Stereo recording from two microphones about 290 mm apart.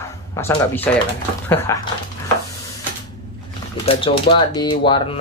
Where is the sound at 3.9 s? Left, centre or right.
Centre.